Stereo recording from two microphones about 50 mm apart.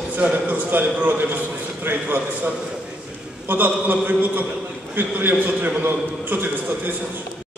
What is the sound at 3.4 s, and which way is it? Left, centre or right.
A man's voice, right.